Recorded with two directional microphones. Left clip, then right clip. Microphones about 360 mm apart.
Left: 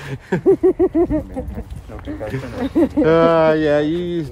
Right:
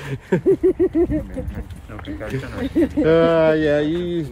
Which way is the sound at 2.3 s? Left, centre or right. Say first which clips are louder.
Left 2 dB; centre.